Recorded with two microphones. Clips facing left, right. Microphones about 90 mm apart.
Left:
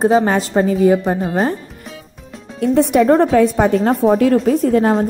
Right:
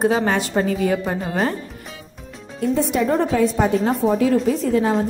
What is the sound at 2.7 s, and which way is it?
A woman's voice, 60° left (ahead or behind).